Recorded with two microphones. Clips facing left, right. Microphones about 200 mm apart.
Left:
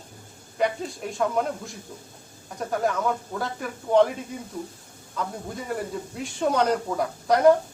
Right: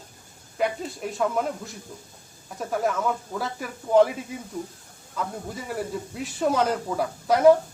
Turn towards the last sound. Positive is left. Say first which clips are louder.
# right 1 dB
turn(degrees=-5)  # may be behind; listen again after turning